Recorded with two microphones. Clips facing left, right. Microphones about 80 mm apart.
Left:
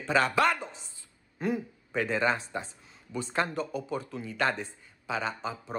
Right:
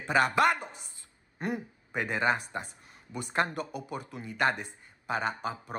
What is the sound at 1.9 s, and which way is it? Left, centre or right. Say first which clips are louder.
Speech: left 1 dB; centre.